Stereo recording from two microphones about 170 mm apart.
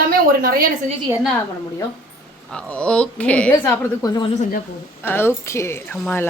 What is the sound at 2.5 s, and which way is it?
A woman's voice, 5° left (ahead or behind).